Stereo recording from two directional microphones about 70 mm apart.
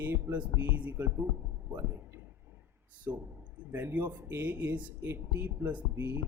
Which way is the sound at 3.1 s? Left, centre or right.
Right.